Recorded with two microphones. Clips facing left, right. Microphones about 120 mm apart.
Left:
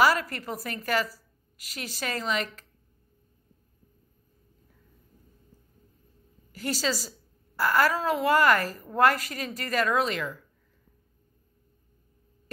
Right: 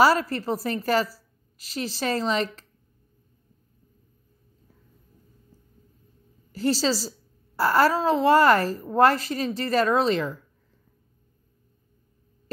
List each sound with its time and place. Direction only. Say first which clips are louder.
0.0 s a woman's voice: right 4 dB; 30° right (ahead or behind)
6.5 s a woman's voice: right 6 dB; 30° right (ahead or behind)